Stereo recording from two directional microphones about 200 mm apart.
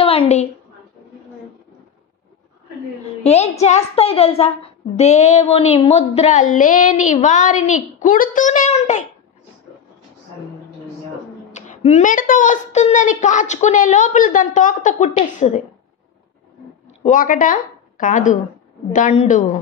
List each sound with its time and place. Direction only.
0.0 s a sound: 30° left (ahead or behind)
3.3 s speech: 30° left (ahead or behind)
11.5 s speech: 35° left (ahead or behind)
17.0 s a woman's voice: 40° left (ahead or behind)